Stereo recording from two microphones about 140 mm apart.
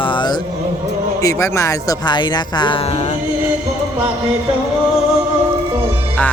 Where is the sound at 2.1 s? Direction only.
30° left (ahead or behind).